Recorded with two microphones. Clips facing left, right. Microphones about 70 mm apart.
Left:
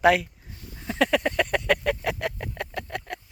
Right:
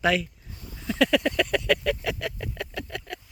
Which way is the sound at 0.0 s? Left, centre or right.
Left.